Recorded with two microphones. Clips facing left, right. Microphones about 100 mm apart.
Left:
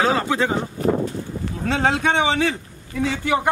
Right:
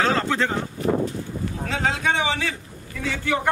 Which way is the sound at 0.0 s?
10° left (ahead or behind).